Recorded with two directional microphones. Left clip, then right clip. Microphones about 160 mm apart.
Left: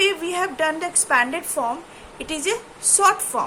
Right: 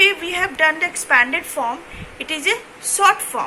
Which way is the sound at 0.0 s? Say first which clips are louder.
Right 5 dB; 35° left (ahead or behind).